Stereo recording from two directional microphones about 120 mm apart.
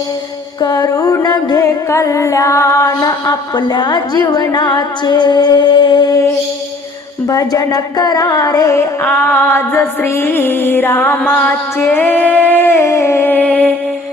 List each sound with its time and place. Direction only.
0.6 s music: 30° left (ahead or behind)
7.3 s music: 30° left (ahead or behind); by 13.7 s 10° left (ahead or behind)